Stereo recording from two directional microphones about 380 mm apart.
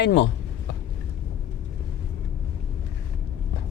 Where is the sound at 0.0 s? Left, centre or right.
Left.